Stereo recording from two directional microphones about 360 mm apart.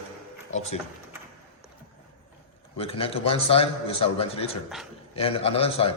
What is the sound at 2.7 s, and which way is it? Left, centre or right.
A man's voice, centre.